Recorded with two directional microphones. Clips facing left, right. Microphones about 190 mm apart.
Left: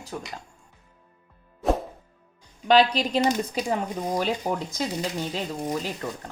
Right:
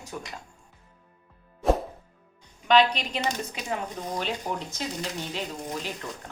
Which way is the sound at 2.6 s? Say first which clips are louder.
Left 2 dB; 35° left (ahead or behind).